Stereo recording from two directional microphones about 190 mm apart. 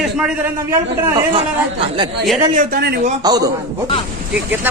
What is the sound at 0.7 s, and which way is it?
Speech, 20° right (ahead or behind).